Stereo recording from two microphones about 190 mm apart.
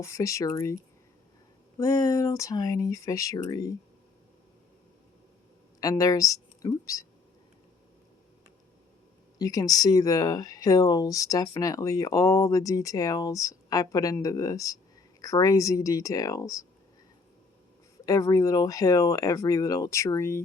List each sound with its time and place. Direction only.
0.0 s speech: 15° left (ahead or behind)
1.8 s speech: 20° left (ahead or behind)
5.8 s speech: 20° left (ahead or behind)
9.4 s speech: 20° left (ahead or behind)
18.0 s speech: 15° left (ahead or behind)